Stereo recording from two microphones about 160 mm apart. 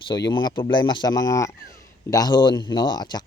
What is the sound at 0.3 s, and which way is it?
Speech, 30° left (ahead or behind).